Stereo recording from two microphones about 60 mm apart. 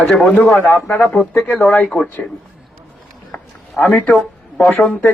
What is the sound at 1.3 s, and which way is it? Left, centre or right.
Speech, centre.